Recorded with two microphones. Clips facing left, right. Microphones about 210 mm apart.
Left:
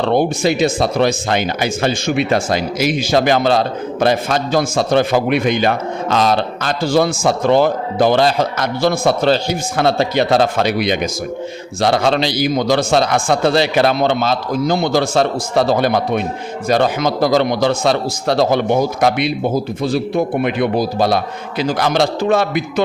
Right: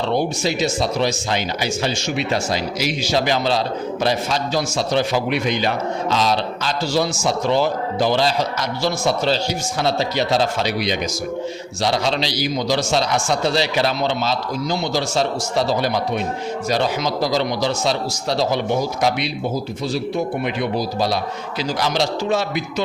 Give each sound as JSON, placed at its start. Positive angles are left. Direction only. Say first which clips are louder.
{"t": 0.0, "sound": "a man's voice", "louder": "left 5 dB", "side_deg": 55}